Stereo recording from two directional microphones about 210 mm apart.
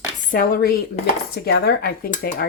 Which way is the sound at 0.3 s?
40° left (ahead or behind).